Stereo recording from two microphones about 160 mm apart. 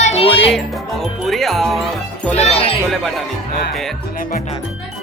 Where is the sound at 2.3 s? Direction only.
40° left (ahead or behind).